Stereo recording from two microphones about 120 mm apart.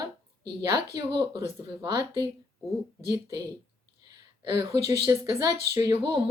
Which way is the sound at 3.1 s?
30° right (ahead or behind).